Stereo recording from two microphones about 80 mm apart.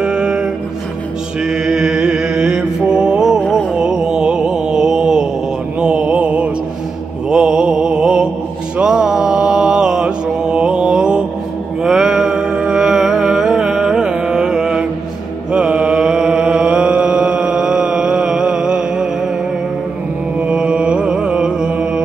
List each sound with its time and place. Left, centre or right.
0.0 s music: centre
1.4 s mantra: centre
11.8 s music: centre
15.5 s mantra: centre
20.4 s music: centre